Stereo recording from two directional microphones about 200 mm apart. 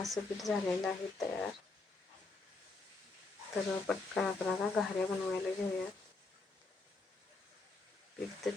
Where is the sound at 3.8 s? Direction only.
Centre (ahead or behind).